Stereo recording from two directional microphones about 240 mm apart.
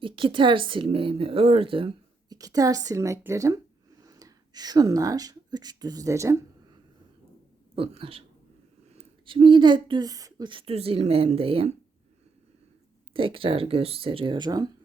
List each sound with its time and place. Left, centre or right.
0.0 s speech: right
7.8 s speech: right
13.1 s speech: right